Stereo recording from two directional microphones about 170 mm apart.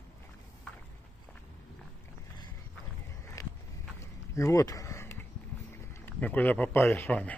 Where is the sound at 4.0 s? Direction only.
20° left (ahead or behind).